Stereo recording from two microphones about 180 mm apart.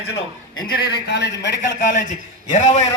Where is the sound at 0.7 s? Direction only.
60° left (ahead or behind); by 1.7 s 80° left.